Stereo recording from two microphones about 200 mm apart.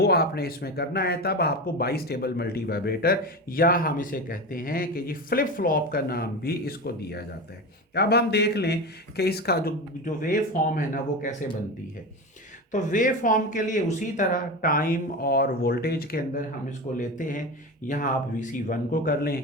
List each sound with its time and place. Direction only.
0.0 s speech: 50° left (ahead or behind)
12.7 s speech: 40° left (ahead or behind)